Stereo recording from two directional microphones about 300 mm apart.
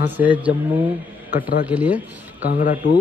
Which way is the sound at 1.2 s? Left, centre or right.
Left.